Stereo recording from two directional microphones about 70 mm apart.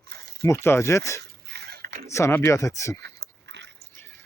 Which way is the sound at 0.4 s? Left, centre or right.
Left.